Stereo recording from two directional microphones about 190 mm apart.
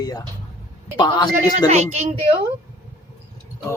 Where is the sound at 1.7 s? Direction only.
35° right (ahead or behind).